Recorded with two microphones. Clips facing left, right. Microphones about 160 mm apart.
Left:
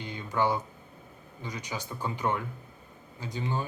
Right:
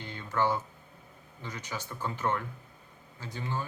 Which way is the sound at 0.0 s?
15° left (ahead or behind).